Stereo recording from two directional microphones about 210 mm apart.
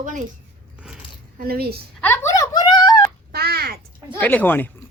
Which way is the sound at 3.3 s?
45° right (ahead or behind).